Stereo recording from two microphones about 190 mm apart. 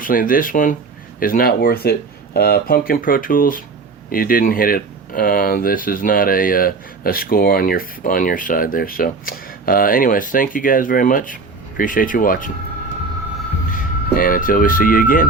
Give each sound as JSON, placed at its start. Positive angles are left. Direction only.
{"t": 0.0, "sound": "speech", "side_deg": 45}
{"t": 13.7, "sound": "speech", "side_deg": 50}